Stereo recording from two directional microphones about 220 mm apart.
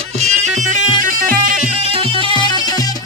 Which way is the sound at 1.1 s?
40° right (ahead or behind).